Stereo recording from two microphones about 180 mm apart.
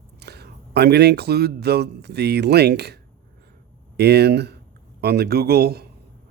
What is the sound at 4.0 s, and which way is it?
Speech, 65° right (ahead or behind).